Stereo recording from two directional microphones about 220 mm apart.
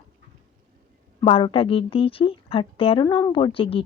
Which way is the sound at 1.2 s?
25° left (ahead or behind).